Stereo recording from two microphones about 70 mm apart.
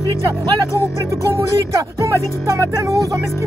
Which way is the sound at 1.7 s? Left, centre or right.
Right.